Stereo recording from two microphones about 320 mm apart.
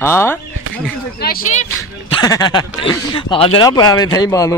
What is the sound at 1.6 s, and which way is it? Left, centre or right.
Speech, centre.